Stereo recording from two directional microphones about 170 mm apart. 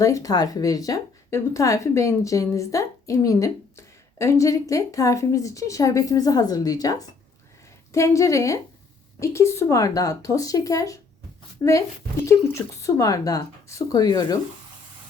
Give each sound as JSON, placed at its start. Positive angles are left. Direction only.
{"t": 0.0, "sound": "a woman's voice", "side_deg": 20}
{"t": 12.2, "sound": "a woman's voice", "side_deg": 15}